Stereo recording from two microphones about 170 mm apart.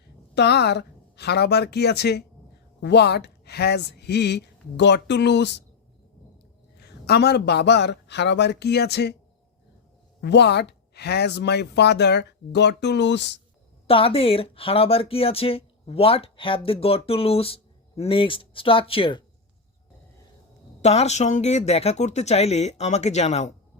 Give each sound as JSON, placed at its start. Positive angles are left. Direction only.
{"t": 0.3, "sound": "a woman's voice", "side_deg": 80}
{"t": 6.7, "sound": "speech", "side_deg": 75}
{"t": 10.2, "sound": "speech", "side_deg": 80}
{"t": 13.8, "sound": "speech", "side_deg": 35}
{"t": 20.8, "sound": "speech", "side_deg": 40}